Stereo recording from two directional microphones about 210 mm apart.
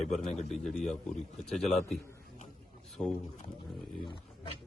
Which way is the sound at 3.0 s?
10° left (ahead or behind).